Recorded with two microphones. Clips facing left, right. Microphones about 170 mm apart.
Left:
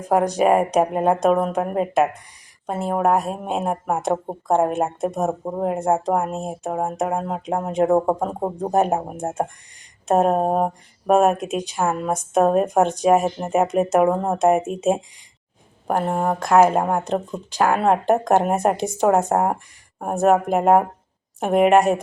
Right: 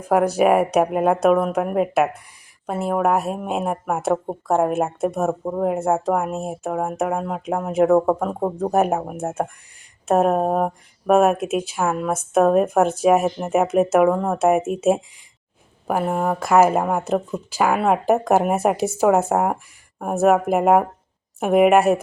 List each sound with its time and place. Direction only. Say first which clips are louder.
0.1 s speech: right 1 dB; 5° right (ahead or behind)
5.1 s speech: right 1 dB; 15° left (ahead or behind)
5.6 s speech: even; 5° right (ahead or behind)
7.2 s speech: even; 30° left (ahead or behind)
7.4 s speech: right 2 dB; 5° right (ahead or behind)
7.9 s speech: right 2 dB; 15° left (ahead or behind)
9.1 s speech: even; 5° right (ahead or behind)